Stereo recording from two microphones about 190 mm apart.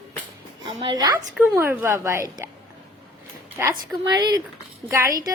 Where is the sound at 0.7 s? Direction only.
25° right (ahead or behind).